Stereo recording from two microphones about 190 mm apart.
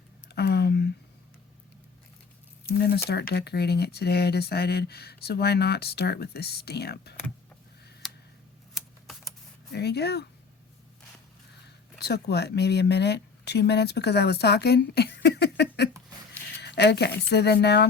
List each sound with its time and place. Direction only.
0.3 s a sound: 60° left (ahead or behind)
2.7 s speech: 55° left (ahead or behind)
8.0 s a sound: centre (ahead or behind)
8.7 s typewriter: centre (ahead or behind)
9.7 s speech: 60° left (ahead or behind)
11.9 s speech: 60° left (ahead or behind)